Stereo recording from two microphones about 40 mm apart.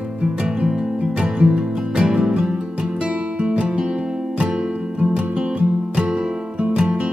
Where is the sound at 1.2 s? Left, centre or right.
Right.